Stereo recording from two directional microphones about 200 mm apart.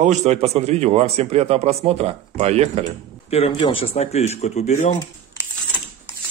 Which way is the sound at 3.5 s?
25° left (ahead or behind).